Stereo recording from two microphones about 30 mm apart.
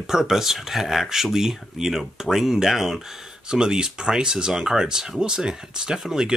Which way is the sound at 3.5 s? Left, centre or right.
Right.